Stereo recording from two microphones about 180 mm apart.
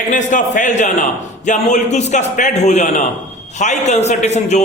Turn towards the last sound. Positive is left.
turn(degrees=40)  # may be behind; listen again after turning